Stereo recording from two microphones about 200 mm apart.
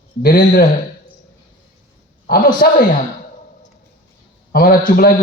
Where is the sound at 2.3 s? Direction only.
50° left (ahead or behind).